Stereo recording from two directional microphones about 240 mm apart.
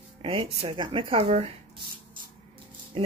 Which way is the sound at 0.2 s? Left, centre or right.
Right.